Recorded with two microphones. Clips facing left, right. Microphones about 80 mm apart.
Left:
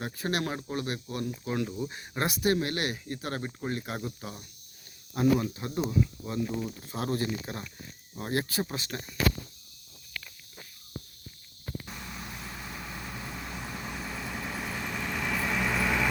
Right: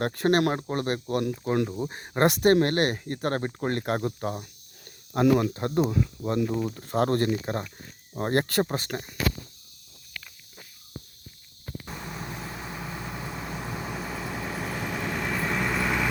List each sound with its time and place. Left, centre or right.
0.0 s speech: right
2.2 s speech: right
8.6 s speech: right
11.9 s vehicle: right; by 16.0 s centre